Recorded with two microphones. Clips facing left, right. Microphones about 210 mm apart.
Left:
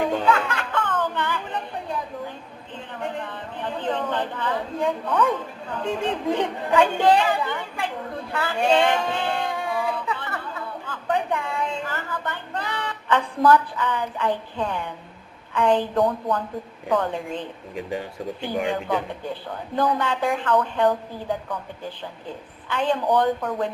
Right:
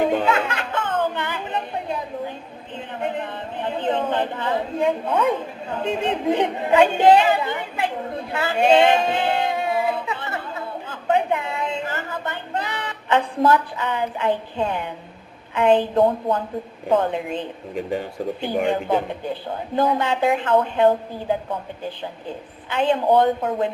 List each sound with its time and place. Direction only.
0.0 s a sound: 25° right (ahead or behind)
2.7 s a woman's voice: 20° right (ahead or behind)
19.2 s a woman's voice: 20° right (ahead or behind)
22.7 s a woman's voice: 25° right (ahead or behind)